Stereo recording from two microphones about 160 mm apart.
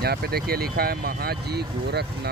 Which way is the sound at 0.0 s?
75° right (ahead or behind).